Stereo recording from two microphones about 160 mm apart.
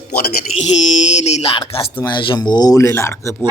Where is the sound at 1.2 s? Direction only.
40° left (ahead or behind); by 3.4 s 20° left (ahead or behind).